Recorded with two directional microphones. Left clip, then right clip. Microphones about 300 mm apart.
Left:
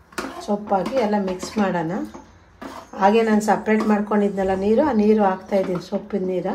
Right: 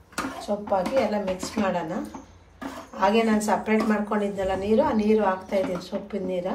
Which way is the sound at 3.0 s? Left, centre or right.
Left.